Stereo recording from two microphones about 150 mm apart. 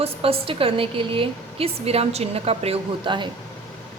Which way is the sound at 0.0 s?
40° right (ahead or behind).